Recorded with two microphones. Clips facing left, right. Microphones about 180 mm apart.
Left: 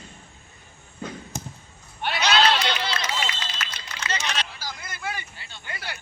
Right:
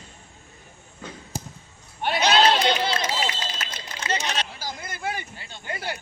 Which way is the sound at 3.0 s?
30° right (ahead or behind).